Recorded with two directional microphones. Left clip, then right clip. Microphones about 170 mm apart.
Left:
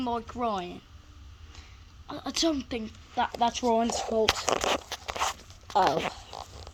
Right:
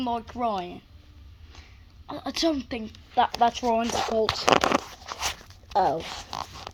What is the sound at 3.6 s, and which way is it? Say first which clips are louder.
Speech: right 2 dB; centre (ahead or behind).